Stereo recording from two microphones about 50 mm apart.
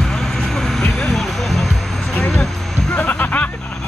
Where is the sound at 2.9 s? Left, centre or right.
Left.